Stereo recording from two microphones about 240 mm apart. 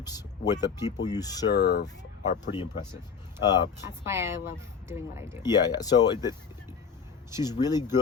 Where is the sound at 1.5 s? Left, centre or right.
Left.